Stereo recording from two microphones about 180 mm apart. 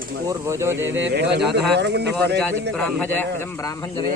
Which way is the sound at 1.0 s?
70° right (ahead or behind).